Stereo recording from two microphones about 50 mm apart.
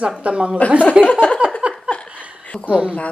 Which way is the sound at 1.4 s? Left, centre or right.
Right.